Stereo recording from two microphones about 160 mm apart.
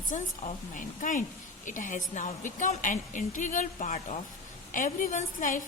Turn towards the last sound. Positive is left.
turn(degrees=55)  # may be behind; listen again after turning